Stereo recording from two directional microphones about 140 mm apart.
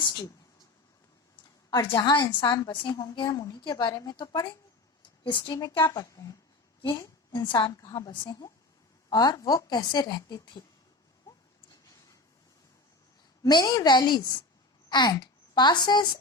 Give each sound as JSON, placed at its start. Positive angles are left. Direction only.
{"t": 1.9, "sound": "a woman's voice", "side_deg": 30}
{"t": 7.3, "sound": "a woman's voice", "side_deg": 35}
{"t": 13.4, "sound": "a woman's voice", "side_deg": 30}